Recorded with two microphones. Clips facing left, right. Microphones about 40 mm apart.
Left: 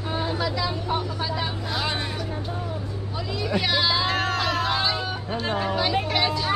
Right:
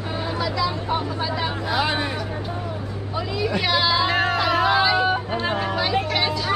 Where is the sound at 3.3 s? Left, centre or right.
Centre.